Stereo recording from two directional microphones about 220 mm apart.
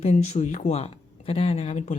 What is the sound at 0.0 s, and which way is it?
Speech, 30° left (ahead or behind).